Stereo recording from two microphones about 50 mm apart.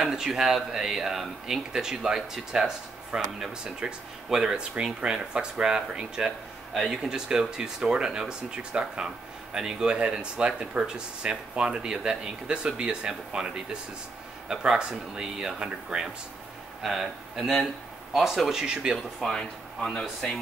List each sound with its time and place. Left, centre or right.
0.0 s speech: centre
6.7 s speech: centre
7.2 s speech: centre
16.8 s speech: centre
19.2 s speech: centre